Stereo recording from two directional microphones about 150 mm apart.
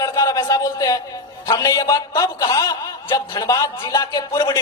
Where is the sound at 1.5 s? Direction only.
20° left (ahead or behind).